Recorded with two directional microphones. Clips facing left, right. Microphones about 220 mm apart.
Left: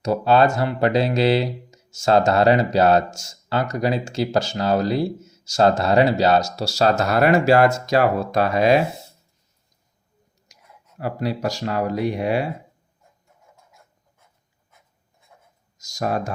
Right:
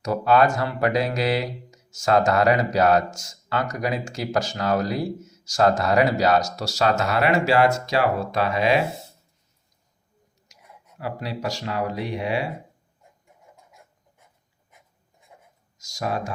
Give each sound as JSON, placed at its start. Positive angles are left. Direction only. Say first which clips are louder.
{"t": 0.0, "sound": "speech", "louder": "left 2 dB", "side_deg": 30}
{"t": 11.0, "sound": "speech", "louder": "left 5 dB", "side_deg": 45}
{"t": 15.8, "sound": "speech", "louder": "left 3 dB", "side_deg": 45}